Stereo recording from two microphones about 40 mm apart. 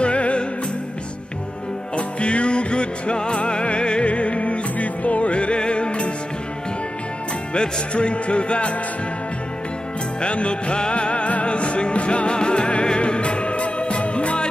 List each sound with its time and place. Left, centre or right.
0.0 s music: left
2.0 s music: left
7.5 s speech: left
10.2 s music: left